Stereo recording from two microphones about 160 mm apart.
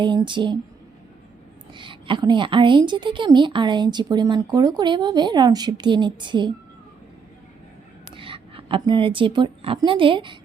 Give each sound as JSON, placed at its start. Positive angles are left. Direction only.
{"t": 0.0, "sound": "a woman's voice", "side_deg": -30}
{"t": 1.7, "sound": "a woman's voice", "side_deg": -30}
{"t": 8.1, "sound": "a woman's voice", "side_deg": -35}